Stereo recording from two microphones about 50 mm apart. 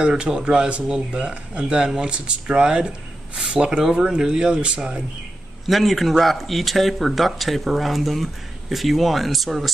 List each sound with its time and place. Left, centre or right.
0.0 s speech: centre
5.7 s speech: centre